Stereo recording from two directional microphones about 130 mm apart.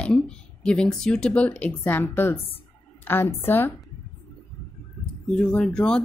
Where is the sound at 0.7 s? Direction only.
5° left (ahead or behind).